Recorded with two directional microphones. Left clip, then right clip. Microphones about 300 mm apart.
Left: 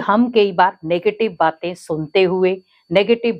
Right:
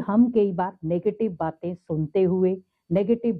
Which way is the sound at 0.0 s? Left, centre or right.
Centre.